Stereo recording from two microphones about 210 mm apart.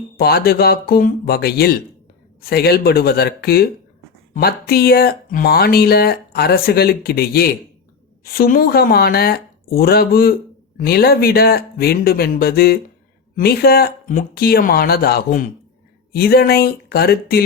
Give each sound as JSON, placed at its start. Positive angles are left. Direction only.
{"t": 0.2, "sound": "speech", "side_deg": 45}